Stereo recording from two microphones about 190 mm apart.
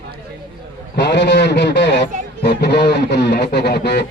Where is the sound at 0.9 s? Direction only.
65° left (ahead or behind).